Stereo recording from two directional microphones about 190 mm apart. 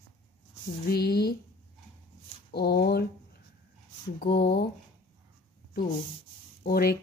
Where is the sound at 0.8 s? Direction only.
55° left (ahead or behind).